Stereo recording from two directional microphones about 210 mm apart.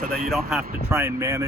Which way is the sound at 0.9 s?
10° right (ahead or behind).